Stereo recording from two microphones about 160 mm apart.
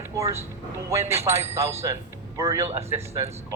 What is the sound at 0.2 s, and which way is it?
Speech, 20° right (ahead or behind).